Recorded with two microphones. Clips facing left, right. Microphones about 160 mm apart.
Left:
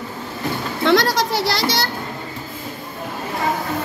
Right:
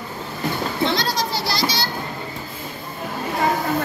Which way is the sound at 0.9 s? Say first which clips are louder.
Left 6 dB; 75° left (ahead or behind).